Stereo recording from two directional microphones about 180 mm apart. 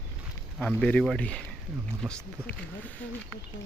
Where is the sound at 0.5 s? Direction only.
5° left (ahead or behind).